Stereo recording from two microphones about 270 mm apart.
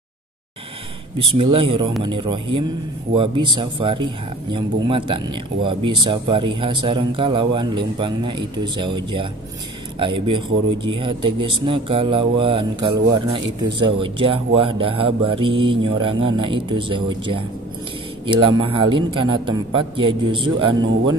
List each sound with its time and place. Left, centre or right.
1.3 s speech: centre
18.2 s speech: centre